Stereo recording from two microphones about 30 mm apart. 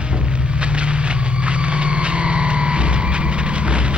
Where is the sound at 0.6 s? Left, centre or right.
Right.